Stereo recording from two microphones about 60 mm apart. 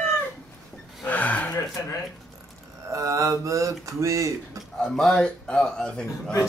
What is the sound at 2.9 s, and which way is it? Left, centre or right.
Mantra, right.